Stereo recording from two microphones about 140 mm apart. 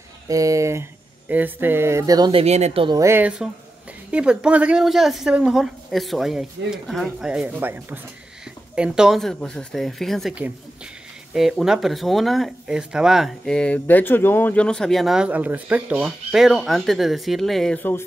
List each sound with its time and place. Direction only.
0.3 s speech: 25° right (ahead or behind)
2.3 s speech: 50° right (ahead or behind)
2.9 s speech: 20° right (ahead or behind); by 17.7 s centre (ahead or behind)
17.7 s speech: 15° left (ahead or behind)